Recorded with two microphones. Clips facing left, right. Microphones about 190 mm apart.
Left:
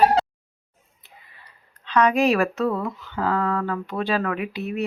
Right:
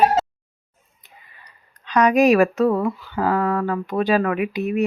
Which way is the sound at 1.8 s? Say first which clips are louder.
Right 4 dB; 15° right (ahead or behind).